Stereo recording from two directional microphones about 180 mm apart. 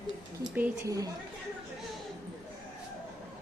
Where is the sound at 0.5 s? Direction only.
15° right (ahead or behind).